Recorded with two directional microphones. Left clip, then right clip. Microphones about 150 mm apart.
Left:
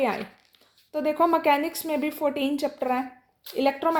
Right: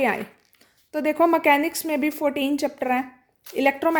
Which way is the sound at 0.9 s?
45° right (ahead or behind).